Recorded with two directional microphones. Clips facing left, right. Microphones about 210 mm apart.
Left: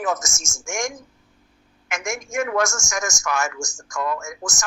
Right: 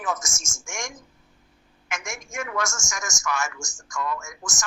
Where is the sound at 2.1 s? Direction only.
45° left (ahead or behind).